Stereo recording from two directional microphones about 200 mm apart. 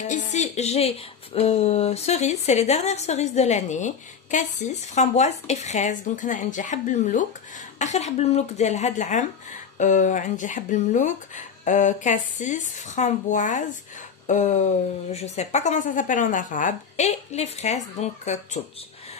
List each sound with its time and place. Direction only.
0.0 s speech: 35° left (ahead or behind)